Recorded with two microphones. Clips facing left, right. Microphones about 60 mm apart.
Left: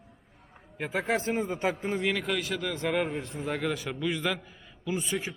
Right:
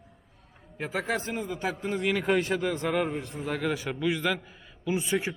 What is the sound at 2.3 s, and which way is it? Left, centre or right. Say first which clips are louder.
Speech: right 6 dB; right.